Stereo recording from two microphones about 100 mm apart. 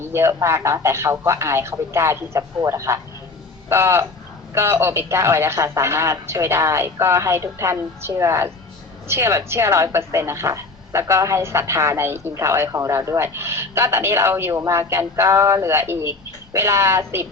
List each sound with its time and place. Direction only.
0.1 s a woman's voice: 25° right (ahead or behind)